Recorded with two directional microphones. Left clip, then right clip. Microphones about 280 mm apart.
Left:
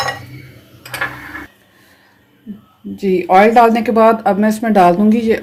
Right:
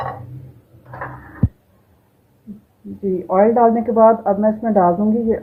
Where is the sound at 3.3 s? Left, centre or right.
Left.